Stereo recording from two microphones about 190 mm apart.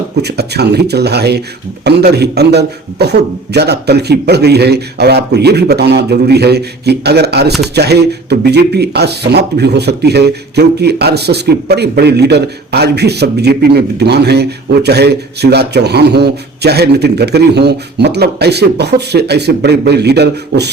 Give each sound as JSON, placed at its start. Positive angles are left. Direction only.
{"t": 0.2, "sound": "speech", "side_deg": -60}